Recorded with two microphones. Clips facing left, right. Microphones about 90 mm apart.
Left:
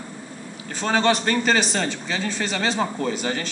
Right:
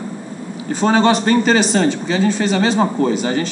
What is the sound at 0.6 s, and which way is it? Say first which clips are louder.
A man's voice: right 7 dB; 15° right (ahead or behind).